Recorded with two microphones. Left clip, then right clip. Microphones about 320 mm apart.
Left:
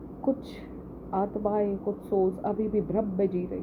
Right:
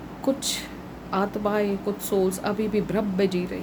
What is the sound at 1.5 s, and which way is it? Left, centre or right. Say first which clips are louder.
Speech: right 3 dB; centre.